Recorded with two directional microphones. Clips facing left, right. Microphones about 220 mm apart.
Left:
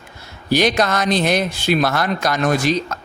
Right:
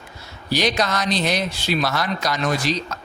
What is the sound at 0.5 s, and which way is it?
A man's voice, 55° left (ahead or behind).